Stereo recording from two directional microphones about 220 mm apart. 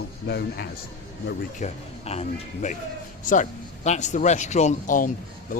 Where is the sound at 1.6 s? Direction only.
30° left (ahead or behind).